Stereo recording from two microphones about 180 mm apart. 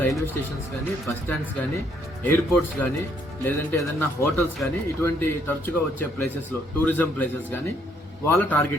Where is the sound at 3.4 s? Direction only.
15° left (ahead or behind).